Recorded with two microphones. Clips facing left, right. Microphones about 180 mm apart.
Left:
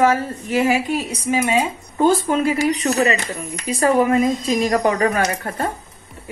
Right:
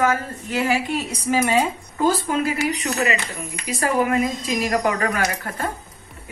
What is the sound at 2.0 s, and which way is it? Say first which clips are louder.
Speech: left 4 dB; 25° left (ahead or behind).